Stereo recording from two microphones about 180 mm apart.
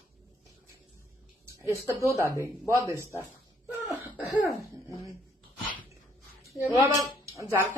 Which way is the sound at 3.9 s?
10° right (ahead or behind).